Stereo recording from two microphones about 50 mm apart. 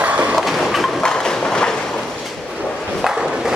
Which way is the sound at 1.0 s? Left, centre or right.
Centre.